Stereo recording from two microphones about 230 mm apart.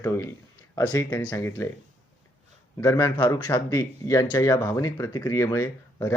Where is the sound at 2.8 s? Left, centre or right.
Centre.